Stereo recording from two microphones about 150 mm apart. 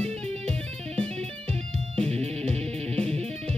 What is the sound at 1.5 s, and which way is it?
Music, 45° right (ahead or behind).